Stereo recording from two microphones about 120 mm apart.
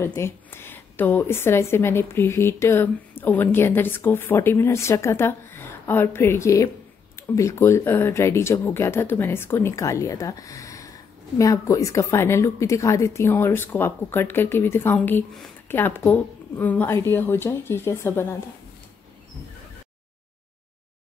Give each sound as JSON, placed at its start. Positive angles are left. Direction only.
{"t": 0.0, "sound": "a woman's voice", "side_deg": 20}